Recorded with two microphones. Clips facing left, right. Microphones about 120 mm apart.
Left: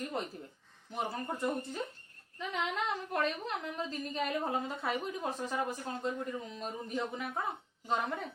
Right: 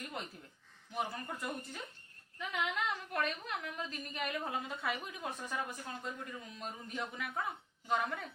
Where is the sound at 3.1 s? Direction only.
30° left (ahead or behind).